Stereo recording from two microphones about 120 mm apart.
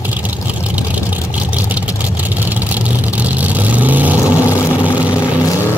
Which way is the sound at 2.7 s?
15° right (ahead or behind).